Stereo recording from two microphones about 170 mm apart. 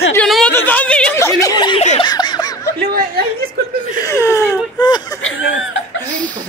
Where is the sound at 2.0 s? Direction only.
25° left (ahead or behind).